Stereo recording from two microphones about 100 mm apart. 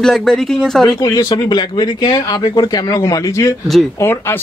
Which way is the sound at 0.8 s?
40° left (ahead or behind).